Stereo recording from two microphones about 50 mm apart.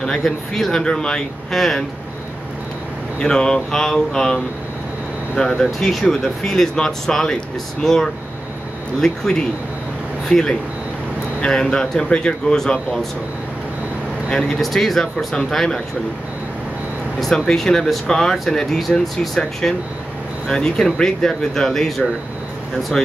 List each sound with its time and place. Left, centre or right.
0.0 s speech: centre
3.2 s speech: centre
5.6 s speech: centre
14.6 s speech: centre
17.5 s speech: centre